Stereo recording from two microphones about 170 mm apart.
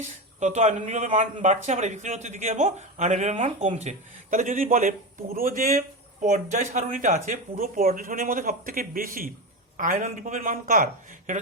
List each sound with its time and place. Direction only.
0.0 s speech: 45° right (ahead or behind)